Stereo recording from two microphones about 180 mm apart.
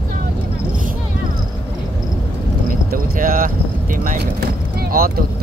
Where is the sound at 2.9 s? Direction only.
50° right (ahead or behind).